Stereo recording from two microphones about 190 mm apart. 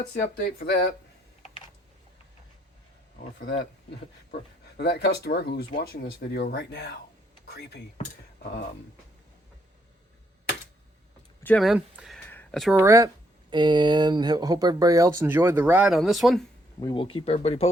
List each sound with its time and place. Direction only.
0.1 s speech: 55° left (ahead or behind)
4.8 s speech: 60° left (ahead or behind)
11.4 s speech: centre (ahead or behind)
12.3 s a sound: 5° left (ahead or behind)
12.7 s speech: 15° right (ahead or behind)
16.8 s speech: 25° left (ahead or behind)